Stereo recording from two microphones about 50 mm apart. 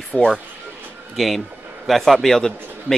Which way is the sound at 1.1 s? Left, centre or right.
Centre.